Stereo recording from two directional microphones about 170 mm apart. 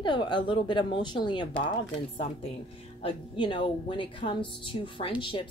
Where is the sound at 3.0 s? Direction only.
30° left (ahead or behind).